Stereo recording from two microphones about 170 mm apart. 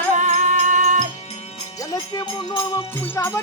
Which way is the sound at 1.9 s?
20° left (ahead or behind).